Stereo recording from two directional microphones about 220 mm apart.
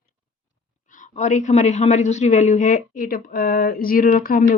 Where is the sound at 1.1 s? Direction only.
35° left (ahead or behind).